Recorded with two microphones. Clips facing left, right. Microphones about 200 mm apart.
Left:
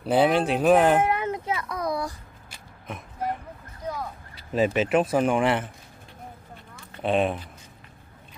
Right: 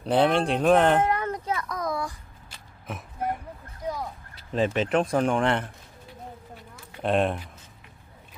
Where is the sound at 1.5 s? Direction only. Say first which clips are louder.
Even; 10° left (ahead or behind).